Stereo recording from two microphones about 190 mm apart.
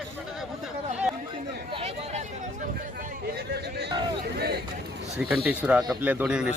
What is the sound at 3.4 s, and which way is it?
Hubbub, 60° right (ahead or behind).